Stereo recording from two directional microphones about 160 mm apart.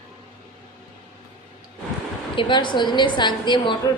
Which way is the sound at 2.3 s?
30° left (ahead or behind).